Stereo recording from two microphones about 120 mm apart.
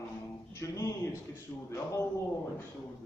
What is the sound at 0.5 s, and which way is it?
Speech, 25° left (ahead or behind).